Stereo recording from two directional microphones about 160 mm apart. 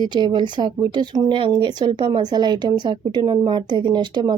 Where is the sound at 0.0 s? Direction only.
30° right (ahead or behind).